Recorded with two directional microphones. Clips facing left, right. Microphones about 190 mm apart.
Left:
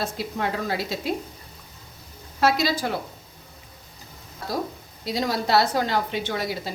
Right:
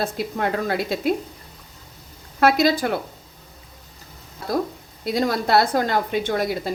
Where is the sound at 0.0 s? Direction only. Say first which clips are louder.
Right 3 dB; 55° right (ahead or behind).